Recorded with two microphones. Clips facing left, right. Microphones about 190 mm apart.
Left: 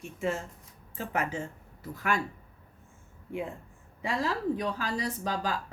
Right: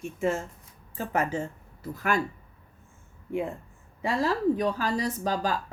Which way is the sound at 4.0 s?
40° right (ahead or behind).